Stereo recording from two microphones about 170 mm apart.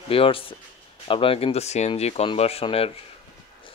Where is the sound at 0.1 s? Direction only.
30° left (ahead or behind).